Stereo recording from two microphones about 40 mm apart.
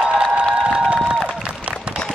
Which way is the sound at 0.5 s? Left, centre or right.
Right.